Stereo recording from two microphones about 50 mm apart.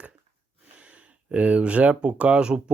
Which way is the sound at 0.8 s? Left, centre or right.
Right.